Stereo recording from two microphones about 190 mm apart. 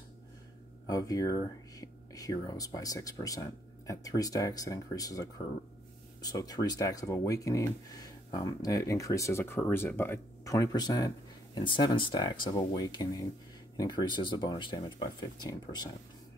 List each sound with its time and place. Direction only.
0.8 s speech: 20° left (ahead or behind)